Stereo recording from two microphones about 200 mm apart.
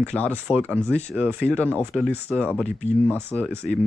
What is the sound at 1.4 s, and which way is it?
Speech, 5° left (ahead or behind).